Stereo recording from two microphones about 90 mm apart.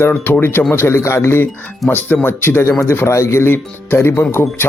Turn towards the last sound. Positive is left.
turn(degrees=25)  # may be behind; listen again after turning